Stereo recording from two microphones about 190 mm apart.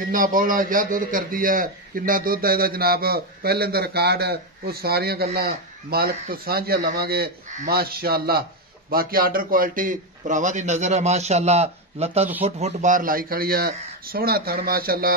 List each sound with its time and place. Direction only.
0.1 s a man's voice: 45° right (ahead or behind)